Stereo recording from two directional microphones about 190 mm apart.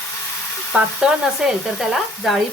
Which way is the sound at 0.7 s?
5° right (ahead or behind).